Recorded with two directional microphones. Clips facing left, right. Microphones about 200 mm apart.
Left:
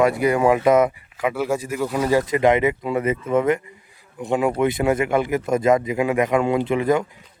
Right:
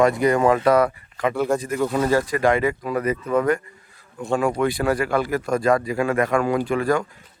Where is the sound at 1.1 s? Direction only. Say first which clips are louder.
Right 1 dB; 10° left (ahead or behind).